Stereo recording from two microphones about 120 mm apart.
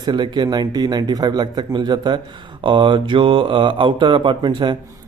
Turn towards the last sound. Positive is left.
turn(degrees=-40)  # may be behind; listen again after turning